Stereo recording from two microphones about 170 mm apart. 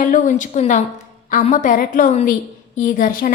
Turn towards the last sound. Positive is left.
turn(degrees=55)  # may be behind; listen again after turning